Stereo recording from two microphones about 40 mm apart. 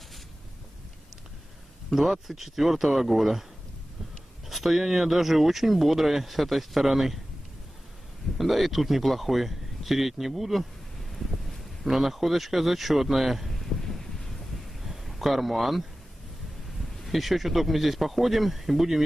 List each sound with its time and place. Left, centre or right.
2.0 s speech: centre
4.5 s speech: centre
8.4 s speech: centre
11.1 s wind noise: centre
11.9 s speech: centre
13.5 s wind noise: centre
14.8 s a sound: centre
17.0 s speech: centre